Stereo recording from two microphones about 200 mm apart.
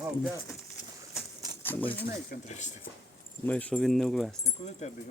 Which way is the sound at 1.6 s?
10° left (ahead or behind).